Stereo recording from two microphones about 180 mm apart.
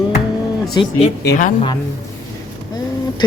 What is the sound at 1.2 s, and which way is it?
Speech, 65° left (ahead or behind).